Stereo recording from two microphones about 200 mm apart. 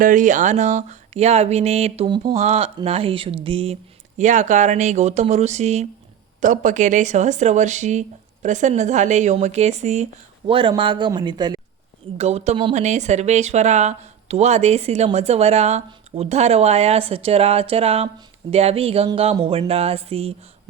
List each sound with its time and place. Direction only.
0.0 s speech: 40° right (ahead or behind); by 11.6 s 20° right (ahead or behind)
12.1 s speech: 30° right (ahead or behind)